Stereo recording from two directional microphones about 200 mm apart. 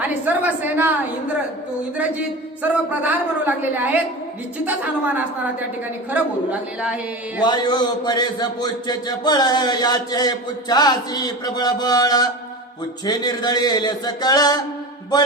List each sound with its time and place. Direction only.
0.0 s a woman's voice: 10° right (ahead or behind)
2.6 s a woman's voice: 10° right (ahead or behind)
7.4 s a man's voice: 20° left (ahead or behind)